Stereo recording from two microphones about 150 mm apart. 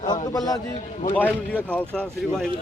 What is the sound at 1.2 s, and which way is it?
Speech, 10° left (ahead or behind).